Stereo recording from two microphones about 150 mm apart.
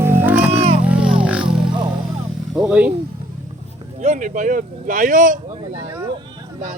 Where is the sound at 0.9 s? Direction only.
5° right (ahead or behind).